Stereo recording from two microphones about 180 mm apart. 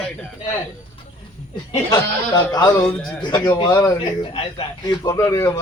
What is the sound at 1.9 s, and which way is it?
Speech, 20° left (ahead or behind).